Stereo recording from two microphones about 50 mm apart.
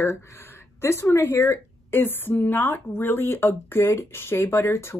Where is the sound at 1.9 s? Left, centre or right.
Left.